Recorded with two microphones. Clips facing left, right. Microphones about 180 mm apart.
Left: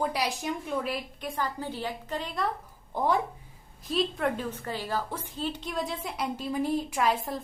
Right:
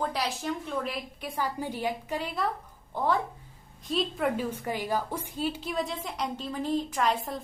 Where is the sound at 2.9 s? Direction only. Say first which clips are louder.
Left 1 dB; 15° left (ahead or behind).